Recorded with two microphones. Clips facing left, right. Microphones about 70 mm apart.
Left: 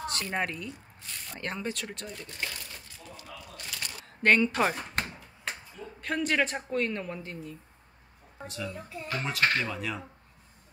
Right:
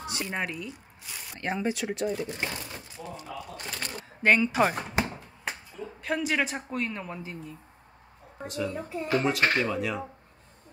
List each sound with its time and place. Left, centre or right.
0.0 s speech: centre
3.3 s a sound: right
4.2 s speech: centre
5.0 s a sound: centre
8.5 s speech: centre
8.7 s speech: right
9.2 s speech: centre